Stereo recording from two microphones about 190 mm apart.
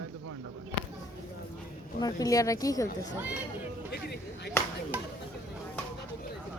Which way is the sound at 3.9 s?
60° left (ahead or behind).